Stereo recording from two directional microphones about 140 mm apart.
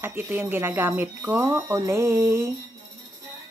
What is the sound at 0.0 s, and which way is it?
Speech, 15° right (ahead or behind).